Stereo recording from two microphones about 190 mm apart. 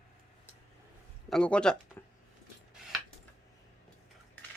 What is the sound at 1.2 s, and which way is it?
Speech, 5° left (ahead or behind).